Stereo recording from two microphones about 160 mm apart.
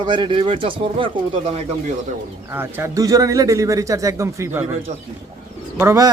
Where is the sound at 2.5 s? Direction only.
15° right (ahead or behind).